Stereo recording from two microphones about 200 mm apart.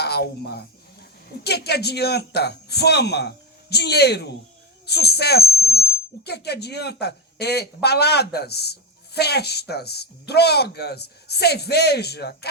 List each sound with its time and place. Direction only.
0.0 s a man's voice: 55° left (ahead or behind)